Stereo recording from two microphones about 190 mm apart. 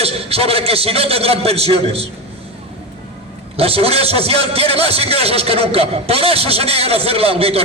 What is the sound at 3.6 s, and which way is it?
A man's voice, 30° right (ahead or behind).